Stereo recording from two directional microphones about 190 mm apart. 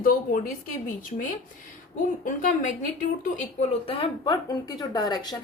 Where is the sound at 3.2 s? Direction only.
40° left (ahead or behind).